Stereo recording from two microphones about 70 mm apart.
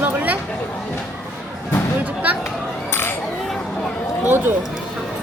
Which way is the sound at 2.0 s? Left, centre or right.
Right.